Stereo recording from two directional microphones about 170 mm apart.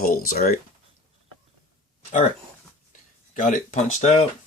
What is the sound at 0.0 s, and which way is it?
Speech, 55° left (ahead or behind).